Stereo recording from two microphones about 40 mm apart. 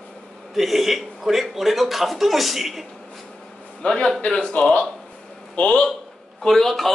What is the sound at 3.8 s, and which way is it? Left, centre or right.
A man's voice, left.